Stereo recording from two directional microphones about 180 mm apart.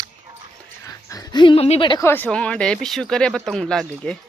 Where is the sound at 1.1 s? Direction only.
20° left (ahead or behind).